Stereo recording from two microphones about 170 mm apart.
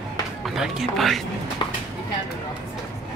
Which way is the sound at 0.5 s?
Centre (ahead or behind).